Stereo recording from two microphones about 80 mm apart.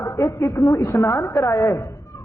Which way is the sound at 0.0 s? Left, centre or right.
Left.